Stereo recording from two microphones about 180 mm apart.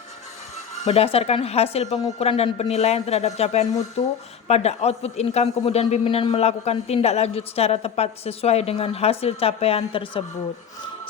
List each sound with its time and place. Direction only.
0.9 s a man's voice: 35° left (ahead or behind)